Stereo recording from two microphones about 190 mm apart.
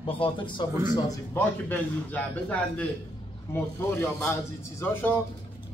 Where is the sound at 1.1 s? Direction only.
10° left (ahead or behind).